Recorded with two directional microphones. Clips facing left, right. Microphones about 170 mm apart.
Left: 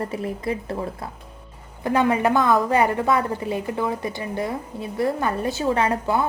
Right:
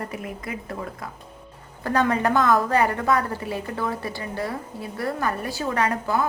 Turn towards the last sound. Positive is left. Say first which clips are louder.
# left 2 dB
turn(degrees=25)  # may be behind; listen again after turning